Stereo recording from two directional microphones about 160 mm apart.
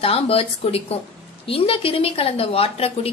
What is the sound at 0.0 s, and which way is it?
A woman's voice, 35° left (ahead or behind).